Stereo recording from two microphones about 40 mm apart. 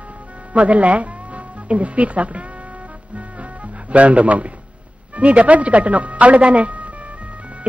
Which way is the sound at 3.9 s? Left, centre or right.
Right.